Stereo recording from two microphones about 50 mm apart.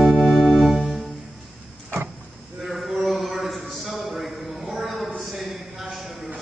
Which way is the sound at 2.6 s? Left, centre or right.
Centre.